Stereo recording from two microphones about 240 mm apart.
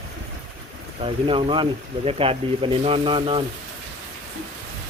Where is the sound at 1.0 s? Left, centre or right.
Right.